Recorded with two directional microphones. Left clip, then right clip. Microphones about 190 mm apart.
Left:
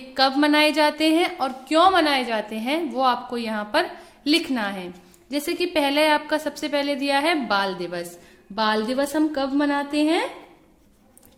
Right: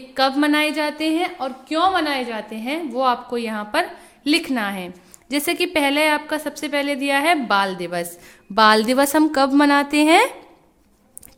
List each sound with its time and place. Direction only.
0.1 s a woman's voice: 15° right (ahead or behind)
8.5 s a woman's voice: 35° right (ahead or behind)